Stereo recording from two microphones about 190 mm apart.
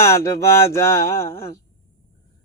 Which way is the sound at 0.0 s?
15° left (ahead or behind).